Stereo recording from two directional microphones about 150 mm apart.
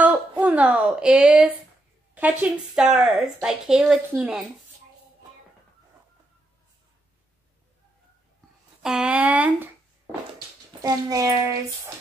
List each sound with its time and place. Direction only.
0.0 s a woman's voice: 10° right (ahead or behind)
8.8 s speech: 5° right (ahead or behind)
10.8 s speech: 25° right (ahead or behind)